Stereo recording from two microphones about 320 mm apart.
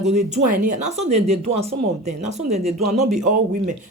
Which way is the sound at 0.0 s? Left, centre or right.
Right.